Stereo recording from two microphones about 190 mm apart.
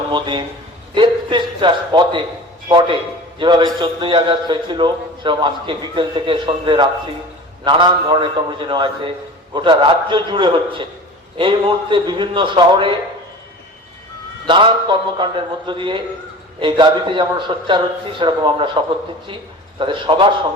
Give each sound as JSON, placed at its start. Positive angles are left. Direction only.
{"t": 0.1, "sound": "a man's voice", "side_deg": -25}
{"t": 14.4, "sound": "a man's voice", "side_deg": -25}
{"t": 19.8, "sound": "a man's voice", "side_deg": -25}